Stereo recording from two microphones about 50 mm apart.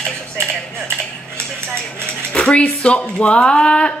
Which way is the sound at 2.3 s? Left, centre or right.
Left.